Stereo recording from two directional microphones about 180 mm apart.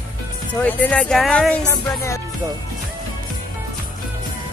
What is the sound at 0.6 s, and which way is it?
Speech, 5° left (ahead or behind).